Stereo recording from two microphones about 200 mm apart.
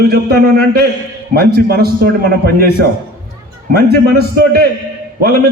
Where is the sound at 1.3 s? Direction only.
50° right (ahead or behind).